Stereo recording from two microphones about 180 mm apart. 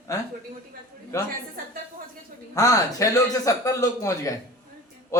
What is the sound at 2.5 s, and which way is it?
A man's voice, 20° left (ahead or behind).